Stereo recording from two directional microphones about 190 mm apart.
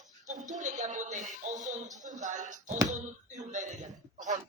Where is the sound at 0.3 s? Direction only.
40° right (ahead or behind).